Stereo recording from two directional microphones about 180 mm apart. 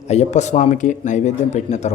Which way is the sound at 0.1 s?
40° left (ahead or behind).